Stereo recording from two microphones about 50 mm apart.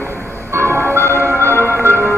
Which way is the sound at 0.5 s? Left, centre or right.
Right.